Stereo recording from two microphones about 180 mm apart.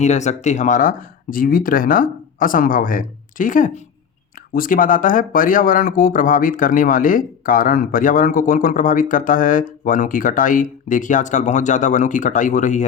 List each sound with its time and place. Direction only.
0.0 s speech: 40° left (ahead or behind)